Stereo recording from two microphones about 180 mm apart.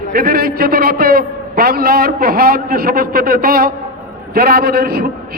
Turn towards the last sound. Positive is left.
turn(degrees=-60)  # may be behind; listen again after turning